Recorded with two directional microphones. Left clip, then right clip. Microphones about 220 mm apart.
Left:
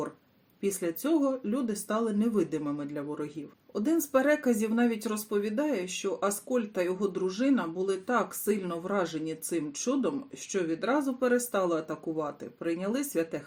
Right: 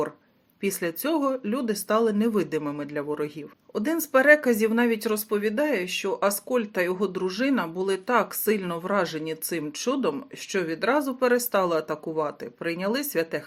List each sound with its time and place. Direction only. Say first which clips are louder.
0.6 s speech: right 3 dB; 20° right (ahead or behind)